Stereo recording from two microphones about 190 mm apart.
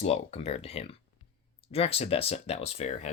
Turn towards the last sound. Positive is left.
turn(degrees=35)  # may be behind; listen again after turning